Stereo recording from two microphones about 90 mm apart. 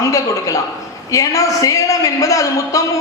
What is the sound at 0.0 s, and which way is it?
A woman's voice, 40° left (ahead or behind).